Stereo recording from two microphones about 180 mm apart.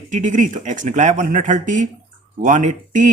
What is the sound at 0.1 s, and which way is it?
Speech, 45° right (ahead or behind).